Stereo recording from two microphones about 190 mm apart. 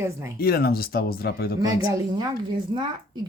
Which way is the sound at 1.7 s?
15° right (ahead or behind).